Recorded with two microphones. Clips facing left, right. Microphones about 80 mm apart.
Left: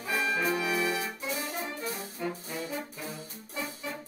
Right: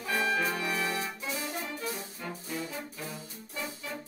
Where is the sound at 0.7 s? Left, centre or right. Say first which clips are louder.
Left 2 dB; centre.